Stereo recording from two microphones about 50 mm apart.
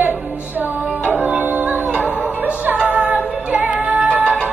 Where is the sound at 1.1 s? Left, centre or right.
Right.